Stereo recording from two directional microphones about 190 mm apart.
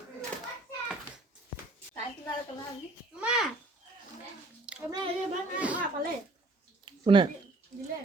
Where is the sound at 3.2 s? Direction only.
5° right (ahead or behind).